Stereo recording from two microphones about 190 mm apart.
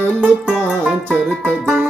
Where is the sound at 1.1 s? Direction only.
10° right (ahead or behind).